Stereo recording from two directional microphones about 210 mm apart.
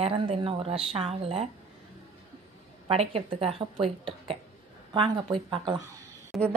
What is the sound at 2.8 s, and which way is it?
Speech, 30° right (ahead or behind).